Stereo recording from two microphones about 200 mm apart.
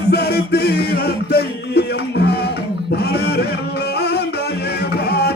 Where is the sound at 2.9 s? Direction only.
55° left (ahead or behind).